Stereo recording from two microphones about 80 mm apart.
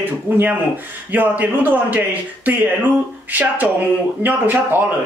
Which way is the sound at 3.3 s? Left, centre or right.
Right.